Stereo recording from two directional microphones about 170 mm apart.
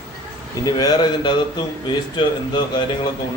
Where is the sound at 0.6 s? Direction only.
25° left (ahead or behind).